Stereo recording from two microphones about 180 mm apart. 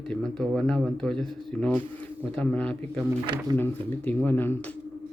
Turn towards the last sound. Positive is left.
turn(degrees=10)  # may be behind; listen again after turning